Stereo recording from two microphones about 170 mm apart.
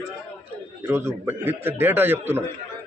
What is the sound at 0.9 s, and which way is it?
Speech, 15° right (ahead or behind).